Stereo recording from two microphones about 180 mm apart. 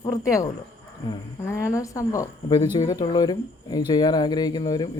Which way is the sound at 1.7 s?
15° left (ahead or behind).